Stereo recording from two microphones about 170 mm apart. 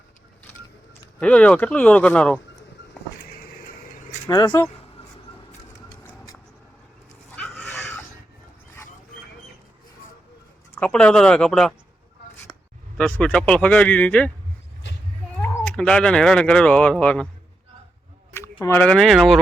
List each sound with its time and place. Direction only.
1.2 s speech: 5° left (ahead or behind)
4.3 s speech: 25° left (ahead or behind)
7.3 s dog: 10° left (ahead or behind)
10.8 s speech: 5° left (ahead or behind)
13.0 s speech: 10° left (ahead or behind)
15.4 s speech: 5° left (ahead or behind)
18.8 s speech: 5° left (ahead or behind)